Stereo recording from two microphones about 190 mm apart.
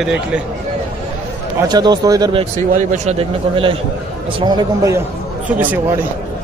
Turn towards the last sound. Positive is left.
turn(degrees=-10)  # may be behind; listen again after turning